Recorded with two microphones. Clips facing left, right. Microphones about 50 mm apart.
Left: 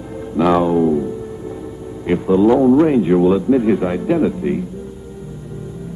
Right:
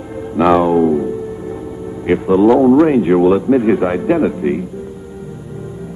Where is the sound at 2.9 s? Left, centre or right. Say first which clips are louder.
Right 2 dB; right.